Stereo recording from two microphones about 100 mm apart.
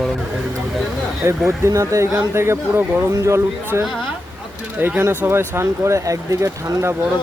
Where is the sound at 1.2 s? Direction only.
25° right (ahead or behind).